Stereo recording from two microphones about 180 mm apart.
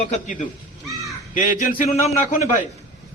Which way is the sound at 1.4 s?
40° left (ahead or behind).